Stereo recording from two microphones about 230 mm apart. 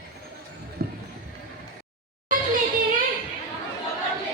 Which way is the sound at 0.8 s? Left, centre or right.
Right.